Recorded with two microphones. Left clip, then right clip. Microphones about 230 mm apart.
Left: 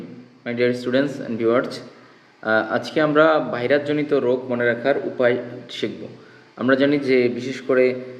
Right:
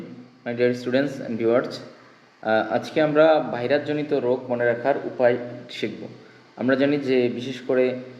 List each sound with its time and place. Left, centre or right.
0.6 s a man's voice: centre